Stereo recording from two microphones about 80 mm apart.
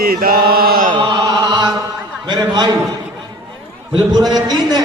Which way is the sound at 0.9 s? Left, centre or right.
Right.